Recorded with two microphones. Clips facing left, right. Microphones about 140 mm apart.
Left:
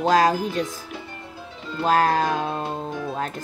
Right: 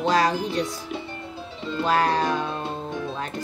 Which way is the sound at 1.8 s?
45° left (ahead or behind).